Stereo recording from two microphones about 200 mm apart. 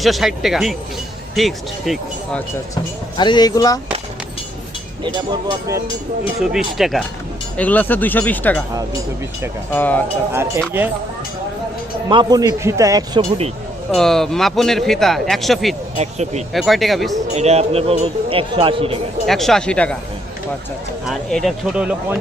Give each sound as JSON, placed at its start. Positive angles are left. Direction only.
{"t": 0.0, "sound": "speech", "side_deg": 0}
{"t": 3.2, "sound": "speech", "side_deg": 20}
{"t": 5.0, "sound": "speech", "side_deg": -20}
{"t": 6.4, "sound": "speech", "side_deg": 0}
{"t": 9.7, "sound": "speech", "side_deg": 10}
{"t": 10.8, "sound": "a man's voice", "side_deg": -10}
{"t": 12.0, "sound": "a man's voice", "side_deg": -20}
{"t": 13.9, "sound": "speech", "side_deg": 0}
{"t": 16.0, "sound": "speech", "side_deg": -35}
{"t": 16.5, "sound": "speech", "side_deg": 0}
{"t": 17.3, "sound": "speech", "side_deg": -30}
{"t": 19.2, "sound": "speech", "side_deg": 0}
{"t": 21.0, "sound": "speech", "side_deg": 0}